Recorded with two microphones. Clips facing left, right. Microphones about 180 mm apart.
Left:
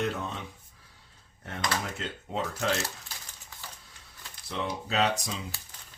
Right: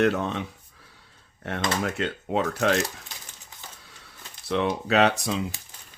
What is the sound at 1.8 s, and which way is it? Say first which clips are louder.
Speech: right 9 dB; 70° right (ahead or behind).